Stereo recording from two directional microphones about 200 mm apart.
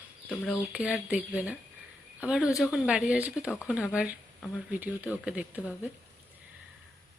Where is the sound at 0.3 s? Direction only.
5° left (ahead or behind).